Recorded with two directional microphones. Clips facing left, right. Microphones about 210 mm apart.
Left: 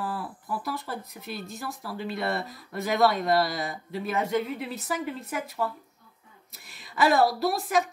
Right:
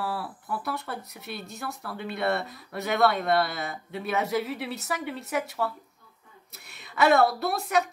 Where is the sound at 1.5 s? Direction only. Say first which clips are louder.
Even; 60° right (ahead or behind).